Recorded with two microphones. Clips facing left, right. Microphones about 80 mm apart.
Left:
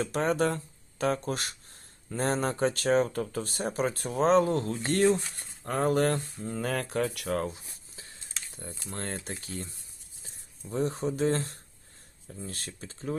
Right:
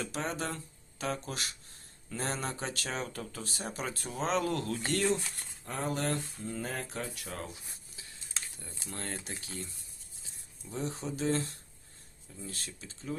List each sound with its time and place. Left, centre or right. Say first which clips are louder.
0.0 s speech: left 9 dB; left
4.9 s speech: left 7 dB; left
7.4 s a sound: left 9 dB; left
9.0 s speech: left 4 dB; left